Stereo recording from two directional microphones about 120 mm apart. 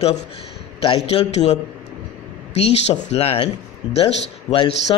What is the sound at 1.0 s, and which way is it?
A man's voice, 60° left (ahead or behind).